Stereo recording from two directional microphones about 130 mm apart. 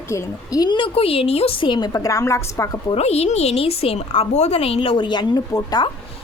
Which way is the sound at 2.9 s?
50° left (ahead or behind).